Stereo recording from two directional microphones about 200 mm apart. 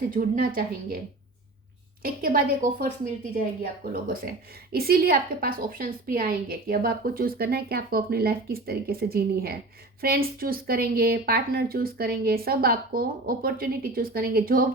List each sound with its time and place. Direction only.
0.1 s a woman's voice: 45° right (ahead or behind)